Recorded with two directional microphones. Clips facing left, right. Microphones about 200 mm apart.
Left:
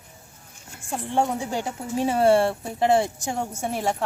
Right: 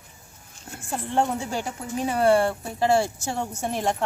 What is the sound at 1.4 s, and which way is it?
Speech, 20° left (ahead or behind).